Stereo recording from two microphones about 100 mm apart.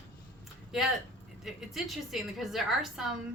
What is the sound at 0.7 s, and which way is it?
A woman's voice, 5° right (ahead or behind).